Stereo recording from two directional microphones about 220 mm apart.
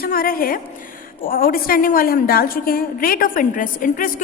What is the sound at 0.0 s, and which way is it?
A woman's voice, 40° left (ahead or behind).